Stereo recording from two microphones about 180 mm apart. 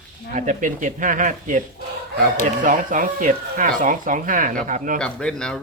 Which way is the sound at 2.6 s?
45° right (ahead or behind).